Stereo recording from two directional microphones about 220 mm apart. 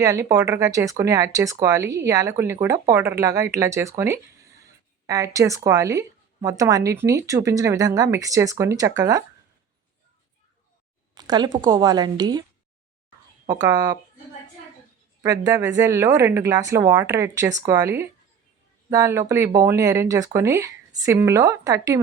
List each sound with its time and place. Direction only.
0.0 s a woman's voice: 15° right (ahead or behind)
11.1 s a woman's voice: 20° right (ahead or behind)
13.5 s a woman's voice: 15° right (ahead or behind)
15.2 s a woman's voice: 15° right (ahead or behind)